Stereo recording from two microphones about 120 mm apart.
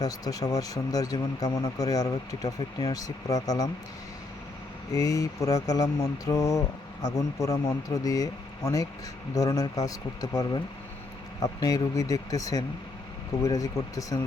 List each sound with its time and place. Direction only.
0.0 s speech: 30° left (ahead or behind)
4.9 s mantra: 30° left (ahead or behind)